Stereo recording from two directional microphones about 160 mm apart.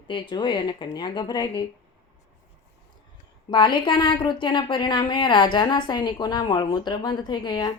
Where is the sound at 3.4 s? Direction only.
30° left (ahead or behind).